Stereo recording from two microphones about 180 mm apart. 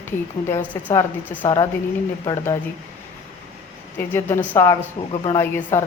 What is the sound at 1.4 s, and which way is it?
Speech, 25° left (ahead or behind).